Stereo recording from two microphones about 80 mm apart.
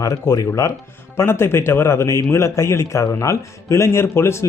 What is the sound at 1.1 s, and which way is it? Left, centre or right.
Speech, left.